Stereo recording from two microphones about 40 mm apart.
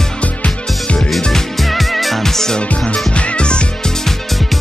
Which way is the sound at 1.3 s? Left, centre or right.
Centre.